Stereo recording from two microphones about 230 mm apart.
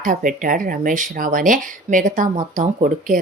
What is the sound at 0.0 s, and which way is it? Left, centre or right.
Speech, right.